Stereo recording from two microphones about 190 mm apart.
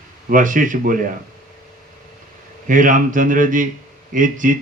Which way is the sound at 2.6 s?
45° right (ahead or behind).